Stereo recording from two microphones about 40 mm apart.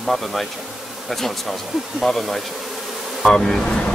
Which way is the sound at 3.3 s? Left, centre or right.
Centre.